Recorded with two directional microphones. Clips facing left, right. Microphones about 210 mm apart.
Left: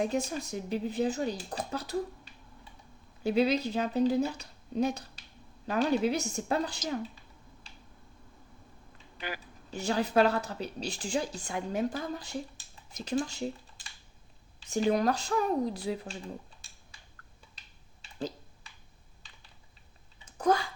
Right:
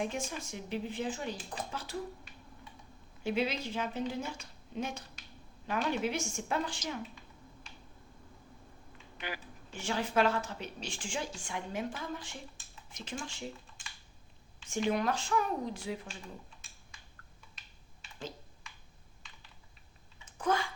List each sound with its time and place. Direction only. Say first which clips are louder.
0.0 s speech: left 6 dB; 40° left (ahead or behind)
3.2 s speech: left 7 dB; 35° left (ahead or behind)
9.1 s a woman's voice: left 2 dB; 40° left (ahead or behind)
18.0 s typing: left 7 dB; 35° left (ahead or behind)
20.4 s speech: left 5 dB; 40° left (ahead or behind)